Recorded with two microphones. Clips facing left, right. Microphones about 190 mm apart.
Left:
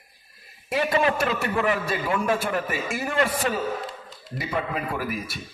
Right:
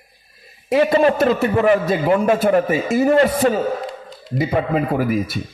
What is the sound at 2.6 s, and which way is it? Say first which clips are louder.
Speech: right 12 dB; 20° right (ahead or behind).